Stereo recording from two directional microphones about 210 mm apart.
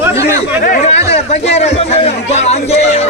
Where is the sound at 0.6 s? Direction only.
35° left (ahead or behind).